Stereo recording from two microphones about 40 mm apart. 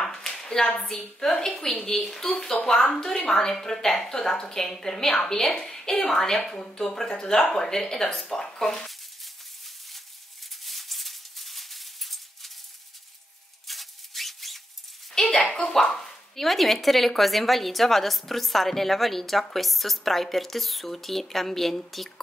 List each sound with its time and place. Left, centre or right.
0.0 s hands: centre
0.7 s a woman's voice: left
1.2 s a woman's voice: centre
10.5 s maraca: centre
13.7 s music: centre
15.1 s a sound: centre
15.7 s speech: centre